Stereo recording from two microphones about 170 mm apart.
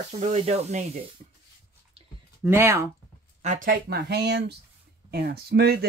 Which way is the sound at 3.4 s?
50° right (ahead or behind).